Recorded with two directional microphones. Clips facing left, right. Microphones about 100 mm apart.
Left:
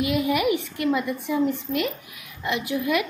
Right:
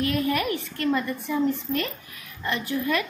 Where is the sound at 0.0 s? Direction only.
15° left (ahead or behind).